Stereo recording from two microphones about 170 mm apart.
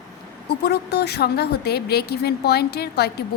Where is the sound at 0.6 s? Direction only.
75° left (ahead or behind).